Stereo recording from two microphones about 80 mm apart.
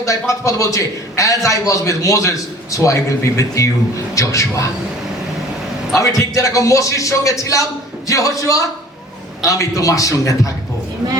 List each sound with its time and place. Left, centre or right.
0.0 s a man's voice: left
6.0 s a man's voice: left